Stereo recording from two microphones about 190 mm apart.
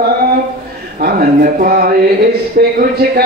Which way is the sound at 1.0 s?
50° right (ahead or behind).